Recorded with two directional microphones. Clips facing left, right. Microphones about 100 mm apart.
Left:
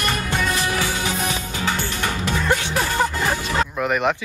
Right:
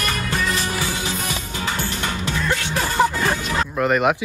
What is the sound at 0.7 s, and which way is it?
Music, 70° left (ahead or behind).